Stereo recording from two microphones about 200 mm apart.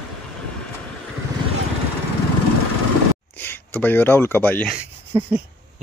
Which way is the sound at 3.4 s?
10° left (ahead or behind).